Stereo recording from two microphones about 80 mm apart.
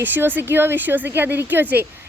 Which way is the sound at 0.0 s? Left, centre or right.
Right.